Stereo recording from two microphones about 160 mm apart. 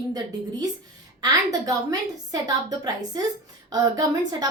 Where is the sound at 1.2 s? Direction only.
20° right (ahead or behind).